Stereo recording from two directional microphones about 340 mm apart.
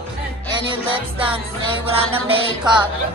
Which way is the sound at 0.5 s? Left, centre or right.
Centre.